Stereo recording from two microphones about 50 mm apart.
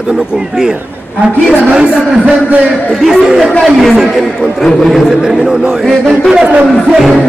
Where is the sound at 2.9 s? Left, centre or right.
Centre.